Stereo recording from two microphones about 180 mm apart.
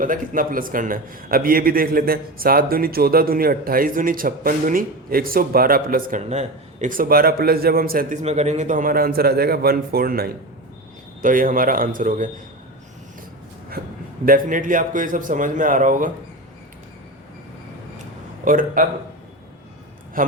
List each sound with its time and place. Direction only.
0.0 s a man's voice: 50° right (ahead or behind)
8.2 s a man's voice: 40° right (ahead or behind)
13.8 s a sound: 55° right (ahead or behind)
14.3 s a man's voice: 50° right (ahead or behind)
18.4 s a man's voice: 50° right (ahead or behind)
20.2 s a man's voice: 50° right (ahead or behind)